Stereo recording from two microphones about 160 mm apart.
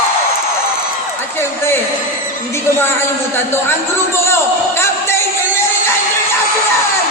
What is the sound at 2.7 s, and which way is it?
Speech, 15° left (ahead or behind).